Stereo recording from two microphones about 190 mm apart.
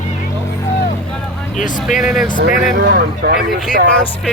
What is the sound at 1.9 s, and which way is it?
Speech, centre (ahead or behind).